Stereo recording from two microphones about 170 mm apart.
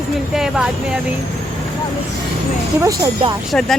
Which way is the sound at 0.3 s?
Centre (ahead or behind).